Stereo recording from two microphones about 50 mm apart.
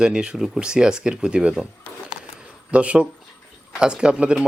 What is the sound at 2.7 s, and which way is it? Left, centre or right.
Speech, right.